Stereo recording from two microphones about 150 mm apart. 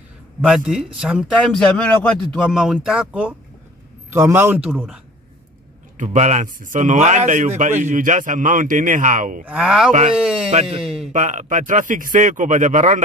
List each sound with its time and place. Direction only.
0.4 s a man's voice: 5° right (ahead or behind)
4.6 s speech: 5° right (ahead or behind)
5.9 s speech: 50° right (ahead or behind)
9.4 s speech: 5° right (ahead or behind)
10.8 s a sound: centre (ahead or behind)
11.1 s speech: 55° right (ahead or behind)